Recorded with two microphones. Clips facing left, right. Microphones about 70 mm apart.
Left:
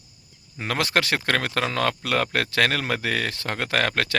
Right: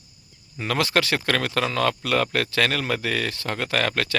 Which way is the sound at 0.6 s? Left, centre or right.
Left.